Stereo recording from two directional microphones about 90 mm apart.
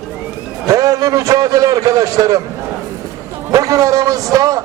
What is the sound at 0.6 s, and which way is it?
A man's voice, 40° right (ahead or behind).